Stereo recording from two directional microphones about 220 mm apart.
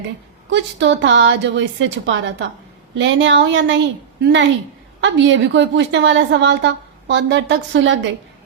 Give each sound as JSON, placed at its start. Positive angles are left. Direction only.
{"t": 0.5, "sound": "a woman's voice", "side_deg": -55}
{"t": 4.9, "sound": "a woman's voice", "side_deg": -55}